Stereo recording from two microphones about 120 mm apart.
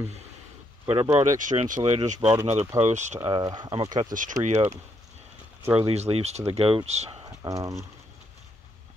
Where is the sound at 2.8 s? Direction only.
75° right (ahead or behind).